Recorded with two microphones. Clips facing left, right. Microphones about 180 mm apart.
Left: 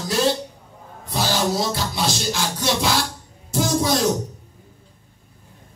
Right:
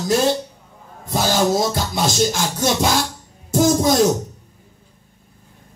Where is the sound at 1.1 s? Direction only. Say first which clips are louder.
Right 4 dB; 45° right (ahead or behind).